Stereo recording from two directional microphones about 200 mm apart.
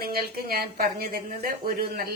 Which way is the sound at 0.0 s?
50° right (ahead or behind).